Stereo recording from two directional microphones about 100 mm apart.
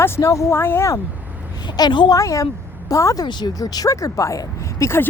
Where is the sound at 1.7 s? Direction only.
50° left (ahead or behind).